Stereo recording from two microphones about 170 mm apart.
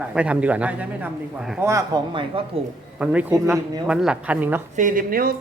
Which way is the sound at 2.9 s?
5° right (ahead or behind).